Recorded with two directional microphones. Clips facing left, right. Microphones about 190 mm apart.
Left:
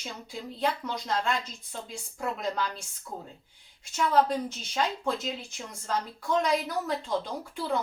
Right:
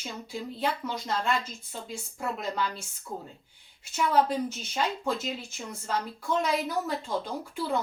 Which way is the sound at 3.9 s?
5° right (ahead or behind).